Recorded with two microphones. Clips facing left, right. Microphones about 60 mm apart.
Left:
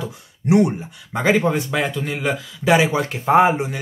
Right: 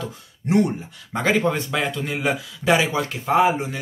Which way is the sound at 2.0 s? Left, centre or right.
Centre.